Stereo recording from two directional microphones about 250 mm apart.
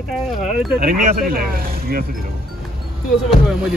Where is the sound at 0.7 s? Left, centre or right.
Right.